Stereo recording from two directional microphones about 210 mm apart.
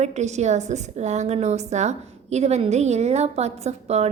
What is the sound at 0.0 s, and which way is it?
Speech, 35° right (ahead or behind).